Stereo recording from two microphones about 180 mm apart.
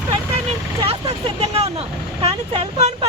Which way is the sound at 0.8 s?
20° right (ahead or behind).